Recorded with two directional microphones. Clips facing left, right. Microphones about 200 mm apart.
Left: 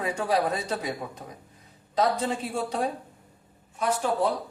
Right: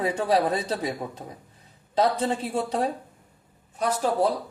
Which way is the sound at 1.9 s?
30° right (ahead or behind).